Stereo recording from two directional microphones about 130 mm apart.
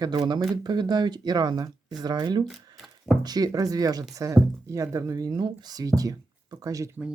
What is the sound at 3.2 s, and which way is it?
Speech, 30° right (ahead or behind).